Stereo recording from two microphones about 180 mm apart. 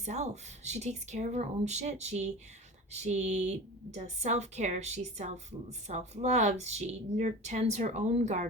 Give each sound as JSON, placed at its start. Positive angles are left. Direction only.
{"t": 0.0, "sound": "speech", "side_deg": -40}